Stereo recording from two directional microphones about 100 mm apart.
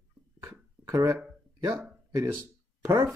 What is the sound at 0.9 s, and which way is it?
Speech, 30° right (ahead or behind).